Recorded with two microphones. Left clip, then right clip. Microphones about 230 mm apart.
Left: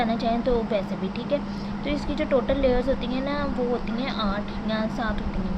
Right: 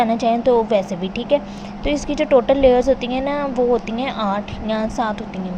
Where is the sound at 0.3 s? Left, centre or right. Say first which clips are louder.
Right 10 dB; centre.